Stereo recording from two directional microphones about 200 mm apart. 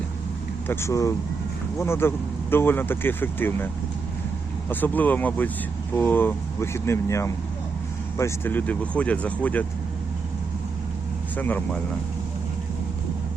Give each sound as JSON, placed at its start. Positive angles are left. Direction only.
{"t": 0.7, "sound": "speech", "side_deg": 15}
{"t": 4.7, "sound": "speech", "side_deg": 10}
{"t": 11.3, "sound": "speech", "side_deg": 10}